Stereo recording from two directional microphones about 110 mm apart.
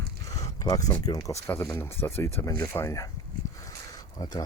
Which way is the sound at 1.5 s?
20° left (ahead or behind).